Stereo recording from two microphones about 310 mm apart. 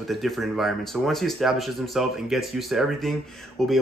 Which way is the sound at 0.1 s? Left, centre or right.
Centre.